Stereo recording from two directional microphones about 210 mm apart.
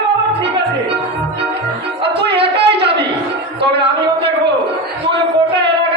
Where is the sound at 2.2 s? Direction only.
50° right (ahead or behind).